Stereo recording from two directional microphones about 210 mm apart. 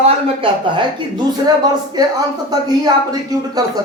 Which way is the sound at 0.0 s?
25° right (ahead or behind).